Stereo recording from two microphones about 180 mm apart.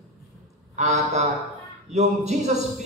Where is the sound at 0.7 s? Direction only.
40° right (ahead or behind).